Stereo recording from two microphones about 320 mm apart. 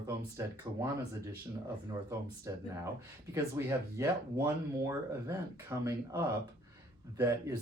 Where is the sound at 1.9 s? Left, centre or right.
Centre.